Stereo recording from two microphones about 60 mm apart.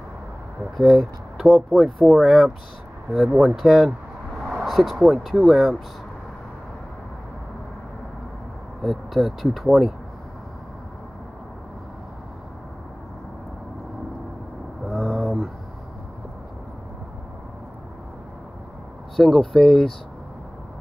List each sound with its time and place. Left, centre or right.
0.7 s speech: centre
3.1 s speech: centre
3.3 s speech: centre
8.8 s speech: centre
14.9 s a sound: centre
19.1 s speech: centre